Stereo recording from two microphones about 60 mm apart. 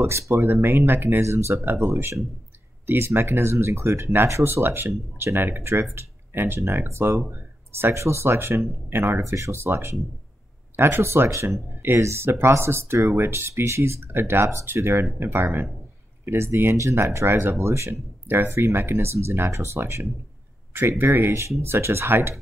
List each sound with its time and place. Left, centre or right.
0.0 s speech: right
1.2 s speech: right